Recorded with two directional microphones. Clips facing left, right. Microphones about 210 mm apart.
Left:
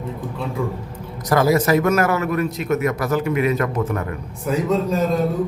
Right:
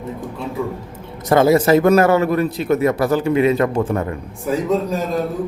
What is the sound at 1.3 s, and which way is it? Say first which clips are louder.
A man's voice: right 4 dB; 25° right (ahead or behind).